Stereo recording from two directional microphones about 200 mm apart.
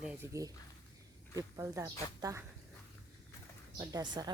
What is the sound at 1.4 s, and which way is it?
Speech, 15° right (ahead or behind).